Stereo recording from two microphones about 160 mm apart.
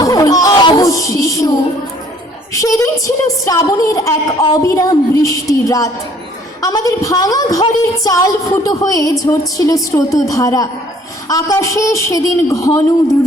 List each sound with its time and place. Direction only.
0.0 s music: 20° left (ahead or behind)
2.5 s a woman's voice: 20° left (ahead or behind)